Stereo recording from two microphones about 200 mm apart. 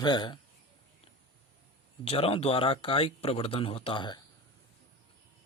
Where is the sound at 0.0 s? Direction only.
20° left (ahead or behind).